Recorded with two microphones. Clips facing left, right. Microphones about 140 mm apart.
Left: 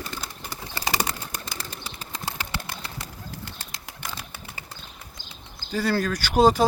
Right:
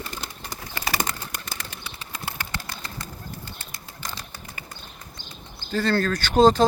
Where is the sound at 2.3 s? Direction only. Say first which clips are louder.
Left 1 dB; 15° left (ahead or behind).